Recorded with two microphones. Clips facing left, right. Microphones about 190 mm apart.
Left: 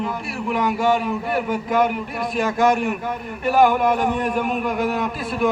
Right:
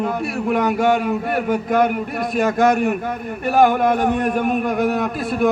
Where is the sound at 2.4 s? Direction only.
45° right (ahead or behind).